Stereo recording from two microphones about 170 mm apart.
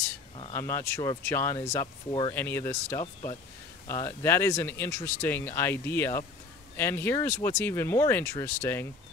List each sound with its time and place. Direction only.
0.5 s speech: 15° left (ahead or behind)